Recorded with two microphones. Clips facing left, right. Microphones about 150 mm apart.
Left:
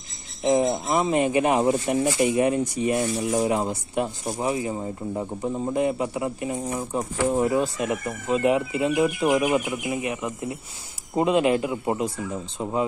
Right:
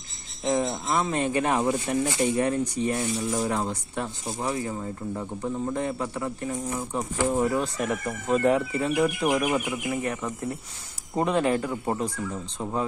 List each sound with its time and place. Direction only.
0.4 s speech: 20° left (ahead or behind)
1.6 s speech: 30° left (ahead or behind)
2.2 s speech: 15° left (ahead or behind)
3.2 s speech: 25° left (ahead or behind)
4.7 s speech: 35° left (ahead or behind)
5.8 s speech: 15° left (ahead or behind)
7.3 s speech: 15° left (ahead or behind)
9.5 s speech: 10° left (ahead or behind)